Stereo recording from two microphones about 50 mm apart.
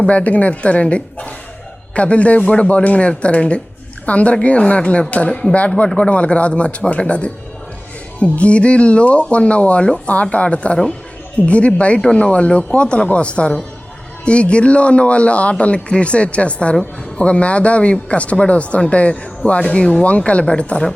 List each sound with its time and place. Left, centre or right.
0.0 s speech: left
8.2 s speech: left